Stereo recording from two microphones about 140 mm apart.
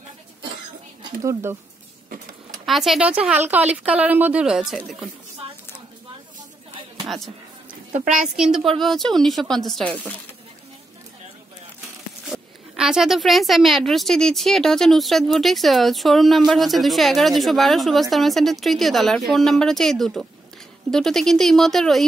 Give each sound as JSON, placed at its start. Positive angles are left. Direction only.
{"t": 1.2, "sound": "speech", "side_deg": -20}
{"t": 2.6, "sound": "speech", "side_deg": 0}
{"t": 8.1, "sound": "speech", "side_deg": -5}
{"t": 12.3, "sound": "speech", "side_deg": -5}